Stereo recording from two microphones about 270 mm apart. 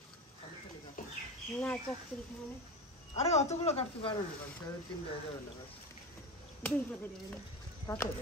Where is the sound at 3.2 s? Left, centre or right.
Left.